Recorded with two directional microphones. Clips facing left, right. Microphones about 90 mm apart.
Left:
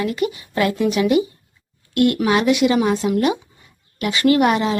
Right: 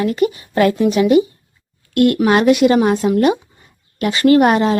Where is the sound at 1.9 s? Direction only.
50° right (ahead or behind).